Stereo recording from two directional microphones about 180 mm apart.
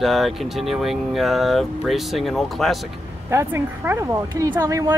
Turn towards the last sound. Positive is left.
turn(degrees=-20)  # may be behind; listen again after turning